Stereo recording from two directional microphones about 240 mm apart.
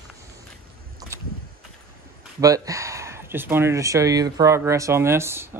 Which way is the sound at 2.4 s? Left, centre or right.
Centre.